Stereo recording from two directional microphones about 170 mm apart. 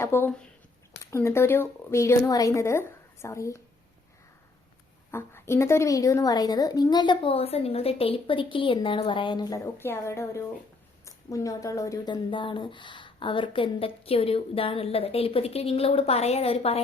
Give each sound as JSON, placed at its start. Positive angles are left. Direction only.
{"t": 0.0, "sound": "speech", "side_deg": 10}
{"t": 5.1, "sound": "a woman's voice", "side_deg": 15}